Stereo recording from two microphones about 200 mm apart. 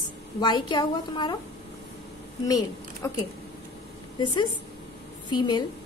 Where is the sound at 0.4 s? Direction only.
20° left (ahead or behind).